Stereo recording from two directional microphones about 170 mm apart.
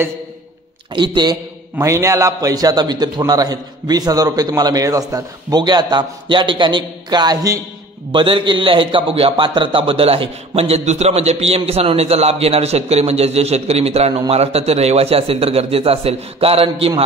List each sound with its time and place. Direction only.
0.9 s a man's voice: 25° right (ahead or behind)